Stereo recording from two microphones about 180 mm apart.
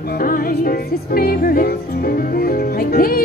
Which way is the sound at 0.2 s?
55° left (ahead or behind).